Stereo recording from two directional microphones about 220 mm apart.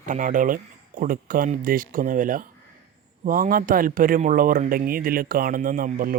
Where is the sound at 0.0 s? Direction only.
35° right (ahead or behind).